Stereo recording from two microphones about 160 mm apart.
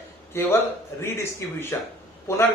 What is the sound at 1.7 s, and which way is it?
Speech, 15° left (ahead or behind).